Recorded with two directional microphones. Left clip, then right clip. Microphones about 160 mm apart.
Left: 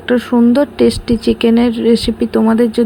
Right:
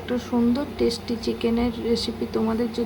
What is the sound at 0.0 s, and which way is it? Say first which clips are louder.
Speech: left 12 dB; 40° left (ahead or behind).